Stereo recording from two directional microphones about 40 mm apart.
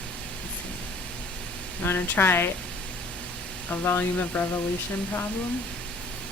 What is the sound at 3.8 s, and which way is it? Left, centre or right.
Speech, left.